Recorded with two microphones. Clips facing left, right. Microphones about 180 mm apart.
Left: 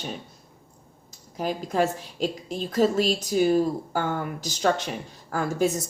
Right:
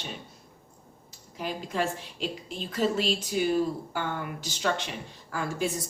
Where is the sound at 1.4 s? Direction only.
45° left (ahead or behind).